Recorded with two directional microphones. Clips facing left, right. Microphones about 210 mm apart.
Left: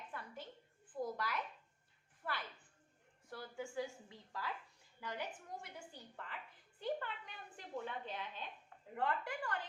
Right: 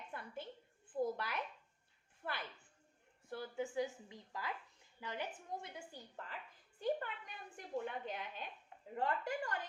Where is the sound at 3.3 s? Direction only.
20° right (ahead or behind).